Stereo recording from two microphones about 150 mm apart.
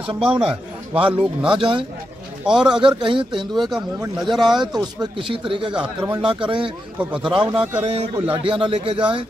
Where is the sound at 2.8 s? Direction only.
35° right (ahead or behind).